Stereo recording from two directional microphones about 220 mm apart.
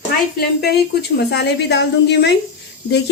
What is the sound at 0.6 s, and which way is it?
Speech, 50° left (ahead or behind).